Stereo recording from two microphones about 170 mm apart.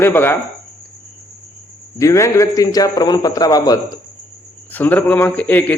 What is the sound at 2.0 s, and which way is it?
A man's voice, 20° left (ahead or behind).